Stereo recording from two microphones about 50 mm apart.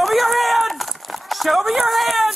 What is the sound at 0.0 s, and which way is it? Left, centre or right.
Run, centre.